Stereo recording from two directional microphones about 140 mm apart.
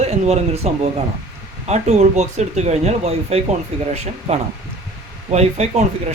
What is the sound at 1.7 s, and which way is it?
Speech, 55° right (ahead or behind).